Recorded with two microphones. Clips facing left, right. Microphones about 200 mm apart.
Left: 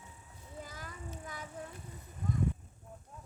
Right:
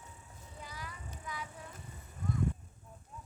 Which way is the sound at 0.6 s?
50° left (ahead or behind).